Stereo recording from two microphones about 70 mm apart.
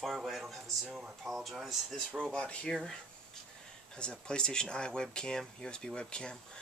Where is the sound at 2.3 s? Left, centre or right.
Centre.